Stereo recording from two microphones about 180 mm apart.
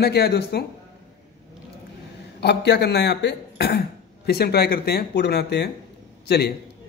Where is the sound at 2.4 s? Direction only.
70° left (ahead or behind).